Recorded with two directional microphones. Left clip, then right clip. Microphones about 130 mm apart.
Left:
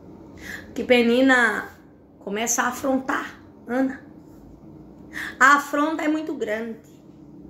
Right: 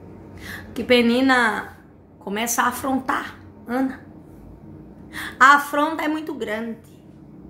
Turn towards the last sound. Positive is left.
turn(degrees=-25)  # may be behind; listen again after turning